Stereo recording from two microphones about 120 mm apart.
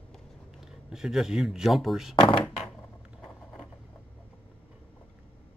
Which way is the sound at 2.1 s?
40° left (ahead or behind).